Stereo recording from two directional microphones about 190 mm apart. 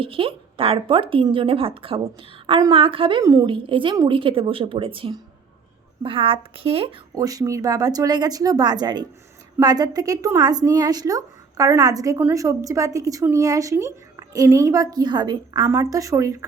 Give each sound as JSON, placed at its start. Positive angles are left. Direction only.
{"t": 0.0, "sound": "a woman's voice", "side_deg": -30}
{"t": 7.1, "sound": "a woman's voice", "side_deg": -20}